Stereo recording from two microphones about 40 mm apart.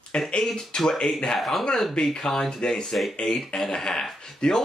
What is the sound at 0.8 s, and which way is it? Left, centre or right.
Speech, centre.